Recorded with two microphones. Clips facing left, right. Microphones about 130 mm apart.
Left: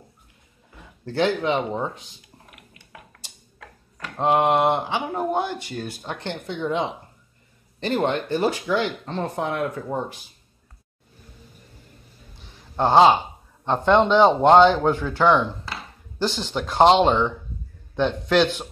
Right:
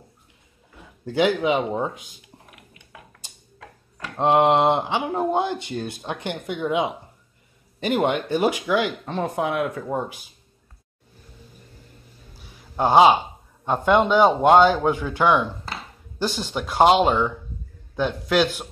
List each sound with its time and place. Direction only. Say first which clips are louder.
1.0 s speech: right 2 dB; 10° right (ahead or behind)
4.2 s speech: right 2 dB; 20° right (ahead or behind)
12.4 s a sound: even; 10° right (ahead or behind)
13.7 s speech: left 1 dB; 10° right (ahead or behind)